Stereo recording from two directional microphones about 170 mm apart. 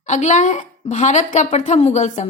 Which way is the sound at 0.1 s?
45° left (ahead or behind).